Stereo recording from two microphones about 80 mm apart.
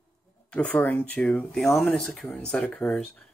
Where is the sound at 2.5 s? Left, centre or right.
Centre.